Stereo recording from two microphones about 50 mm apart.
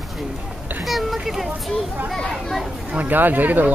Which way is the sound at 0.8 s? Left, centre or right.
Centre.